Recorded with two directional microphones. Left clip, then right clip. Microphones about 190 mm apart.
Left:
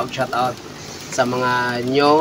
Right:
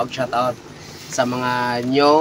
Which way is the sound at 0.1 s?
Centre (ahead or behind).